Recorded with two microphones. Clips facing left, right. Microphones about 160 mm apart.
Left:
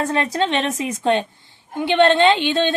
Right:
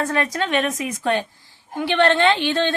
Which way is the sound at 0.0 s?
25° left (ahead or behind).